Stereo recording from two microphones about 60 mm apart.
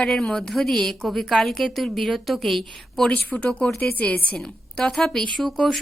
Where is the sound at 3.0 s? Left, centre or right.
Centre.